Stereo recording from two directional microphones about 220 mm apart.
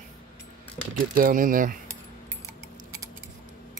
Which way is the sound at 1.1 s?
40° right (ahead or behind).